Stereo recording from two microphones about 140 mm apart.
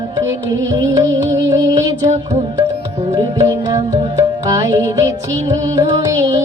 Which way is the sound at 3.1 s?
25° right (ahead or behind).